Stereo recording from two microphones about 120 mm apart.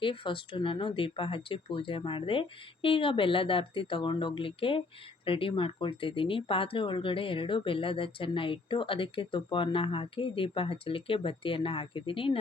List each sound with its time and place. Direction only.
0.0 s speech: 45° left (ahead or behind)